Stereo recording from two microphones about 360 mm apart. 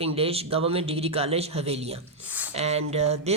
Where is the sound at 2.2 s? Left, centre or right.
Centre.